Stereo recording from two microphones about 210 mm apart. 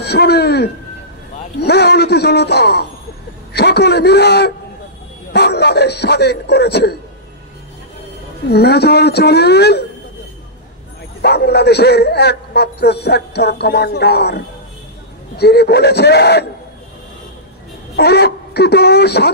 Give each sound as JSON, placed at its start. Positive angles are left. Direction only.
{"t": 0.0, "sound": "a man's voice", "side_deg": 50}
{"t": 8.5, "sound": "a man's voice", "side_deg": 50}
{"t": 11.1, "sound": "a man's voice", "side_deg": 50}
{"t": 17.9, "sound": "a man's voice", "side_deg": 50}